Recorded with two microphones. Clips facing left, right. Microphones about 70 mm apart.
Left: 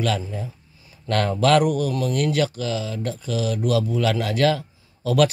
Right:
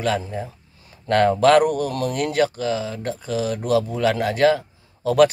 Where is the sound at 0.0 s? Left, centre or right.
Right.